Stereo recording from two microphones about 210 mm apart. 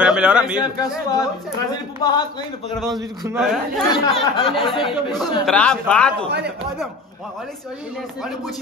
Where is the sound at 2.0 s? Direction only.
15° left (ahead or behind).